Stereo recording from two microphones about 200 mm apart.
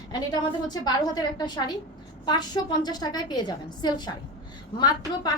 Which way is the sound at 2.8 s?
20° left (ahead or behind).